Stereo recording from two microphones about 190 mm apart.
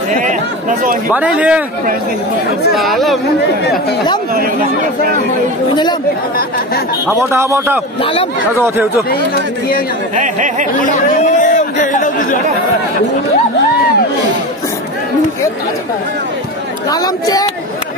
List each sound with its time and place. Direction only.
0.2 s speech: 45° right (ahead or behind)
1.1 s a man's voice: 5° right (ahead or behind)
2.8 s speech: centre (ahead or behind)
4.4 s speech: 50° right (ahead or behind)
7.1 s a man's voice: 15° right (ahead or behind)
8.0 s speech: 30° left (ahead or behind)
8.5 s a man's voice: 15° right (ahead or behind)
10.1 s speech: 40° right (ahead or behind)
10.8 s chatter: 45° left (ahead or behind)
16.9 s speech: 20° left (ahead or behind)